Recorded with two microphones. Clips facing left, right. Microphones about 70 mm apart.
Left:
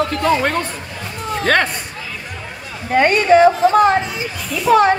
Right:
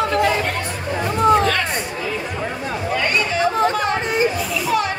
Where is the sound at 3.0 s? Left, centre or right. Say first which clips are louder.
Left 11 dB; left.